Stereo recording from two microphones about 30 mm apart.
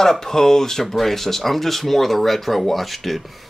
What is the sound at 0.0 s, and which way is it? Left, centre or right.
Speech, centre.